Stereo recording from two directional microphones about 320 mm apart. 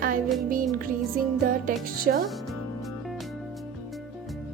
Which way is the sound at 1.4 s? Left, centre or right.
Right.